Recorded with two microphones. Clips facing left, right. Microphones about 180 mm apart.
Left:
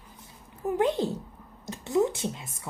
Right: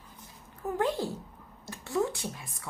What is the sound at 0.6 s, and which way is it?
A woman's voice, 20° left (ahead or behind).